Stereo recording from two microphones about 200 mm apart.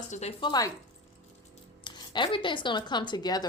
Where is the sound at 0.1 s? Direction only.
30° left (ahead or behind).